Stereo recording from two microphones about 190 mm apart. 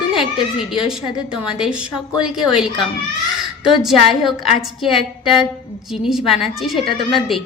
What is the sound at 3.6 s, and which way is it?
A woman's voice, centre (ahead or behind).